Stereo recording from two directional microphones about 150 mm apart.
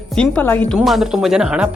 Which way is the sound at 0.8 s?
Centre (ahead or behind).